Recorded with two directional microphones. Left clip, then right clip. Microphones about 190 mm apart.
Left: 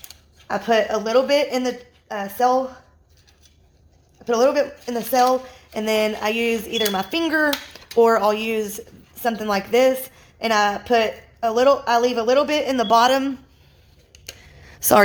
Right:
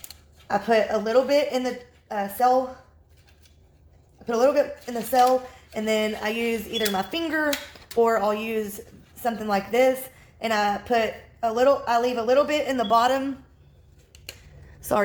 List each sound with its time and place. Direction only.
0.4 s a woman's voice: 40° left (ahead or behind)
4.3 s a woman's voice: 40° left (ahead or behind)
14.7 s a sound: 55° left (ahead or behind)